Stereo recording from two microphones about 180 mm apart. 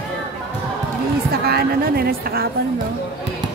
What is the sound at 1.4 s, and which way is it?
Speech, 60° right (ahead or behind).